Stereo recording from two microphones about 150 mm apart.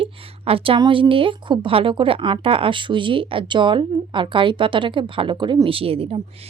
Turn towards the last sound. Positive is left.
turn(degrees=-40)  # may be behind; listen again after turning